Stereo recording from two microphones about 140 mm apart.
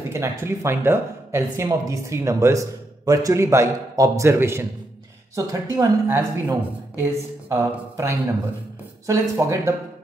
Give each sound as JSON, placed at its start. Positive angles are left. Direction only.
{"t": 0.1, "sound": "speech", "side_deg": -20}